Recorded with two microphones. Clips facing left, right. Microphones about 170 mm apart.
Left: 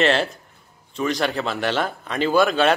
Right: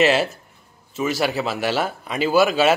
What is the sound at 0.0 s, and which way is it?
A man's voice, 5° right (ahead or behind).